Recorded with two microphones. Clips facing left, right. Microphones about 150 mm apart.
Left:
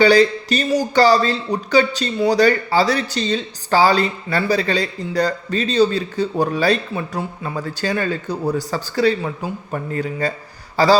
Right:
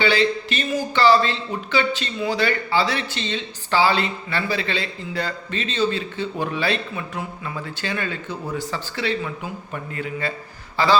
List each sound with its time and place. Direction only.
0.0 s a man's voice: 40° left (ahead or behind)